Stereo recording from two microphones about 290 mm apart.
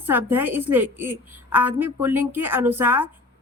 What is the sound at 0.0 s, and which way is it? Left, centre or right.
Speech, centre.